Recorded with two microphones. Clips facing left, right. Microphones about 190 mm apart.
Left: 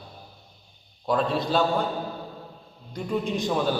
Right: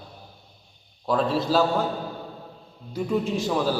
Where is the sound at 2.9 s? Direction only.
5° right (ahead or behind).